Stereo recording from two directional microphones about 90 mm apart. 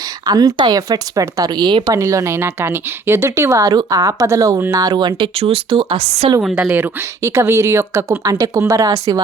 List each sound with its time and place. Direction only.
0.3 s speech: 45° right (ahead or behind); by 5.5 s 80° right
5.7 s speech: 65° right (ahead or behind)
6.6 s speech: 20° right (ahead or behind)
7.2 s speech: 35° right (ahead or behind)